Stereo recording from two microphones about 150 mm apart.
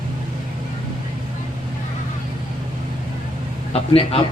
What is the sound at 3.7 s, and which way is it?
Speech, 40° left (ahead or behind).